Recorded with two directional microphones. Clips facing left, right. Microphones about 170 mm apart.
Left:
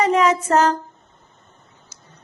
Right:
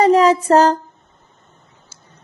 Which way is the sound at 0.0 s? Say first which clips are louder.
Right 5 dB; 35° right (ahead or behind).